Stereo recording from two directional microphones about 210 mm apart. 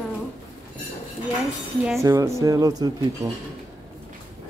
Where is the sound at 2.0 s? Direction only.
15° right (ahead or behind).